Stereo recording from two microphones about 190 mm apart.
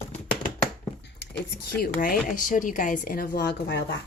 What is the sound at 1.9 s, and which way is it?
A woman's voice, 45° left (ahead or behind).